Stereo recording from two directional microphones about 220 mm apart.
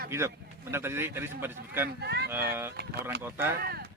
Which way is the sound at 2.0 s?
50° right (ahead or behind).